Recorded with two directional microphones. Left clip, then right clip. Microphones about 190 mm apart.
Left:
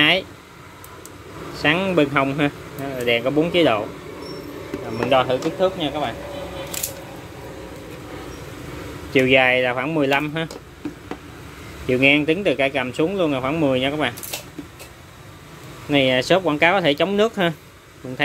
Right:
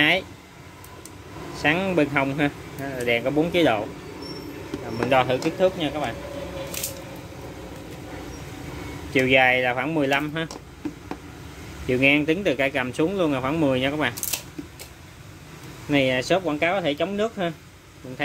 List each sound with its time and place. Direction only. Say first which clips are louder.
1.5 s speech: left 3 dB; 5° left (ahead or behind)
4.8 s speech: left 2 dB; centre (ahead or behind)
9.1 s speech: left 3 dB; 10° left (ahead or behind)
11.8 s speech: left 3 dB; 5° left (ahead or behind)
15.9 s speech: left 4 dB; 10° left (ahead or behind); by 17.6 s 30° left (ahead or behind)